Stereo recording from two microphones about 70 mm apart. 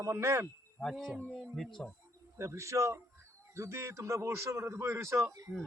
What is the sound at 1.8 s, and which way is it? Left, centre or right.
Speech, centre.